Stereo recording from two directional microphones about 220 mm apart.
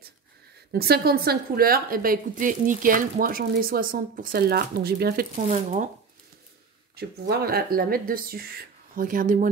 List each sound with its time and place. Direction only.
0.7 s a woman's voice: 45° right (ahead or behind)
7.0 s a woman's voice: 45° right (ahead or behind)